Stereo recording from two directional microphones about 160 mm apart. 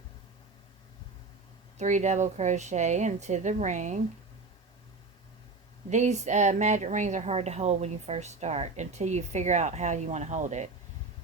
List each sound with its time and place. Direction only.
1.8 s speech: 50° right (ahead or behind)
5.9 s speech: 45° right (ahead or behind)